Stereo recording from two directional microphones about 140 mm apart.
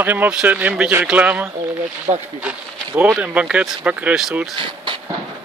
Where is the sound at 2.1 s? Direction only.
30° right (ahead or behind).